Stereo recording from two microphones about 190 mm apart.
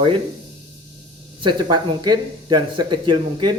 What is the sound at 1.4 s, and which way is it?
Speech, 25° right (ahead or behind).